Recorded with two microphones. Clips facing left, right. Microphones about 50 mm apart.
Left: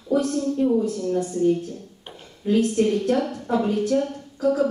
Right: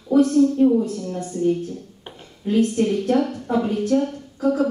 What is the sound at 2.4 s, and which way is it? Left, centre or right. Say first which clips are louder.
A woman's voice: right 1 dB; centre.